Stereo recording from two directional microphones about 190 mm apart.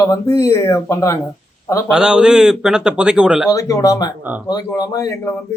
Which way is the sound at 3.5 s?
20° left (ahead or behind).